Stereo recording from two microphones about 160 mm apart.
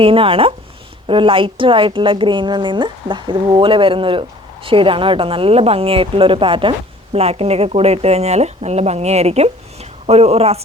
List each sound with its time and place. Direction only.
0.0 s a woman's voice: 35° right (ahead or behind)